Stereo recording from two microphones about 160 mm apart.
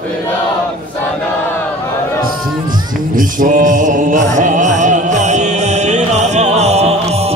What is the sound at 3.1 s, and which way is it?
Music, 55° right (ahead or behind).